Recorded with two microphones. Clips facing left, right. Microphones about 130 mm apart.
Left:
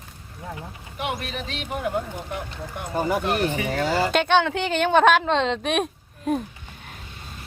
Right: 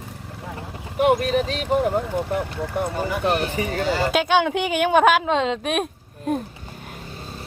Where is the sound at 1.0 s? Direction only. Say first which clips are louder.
Right 12 dB; 45° right (ahead or behind).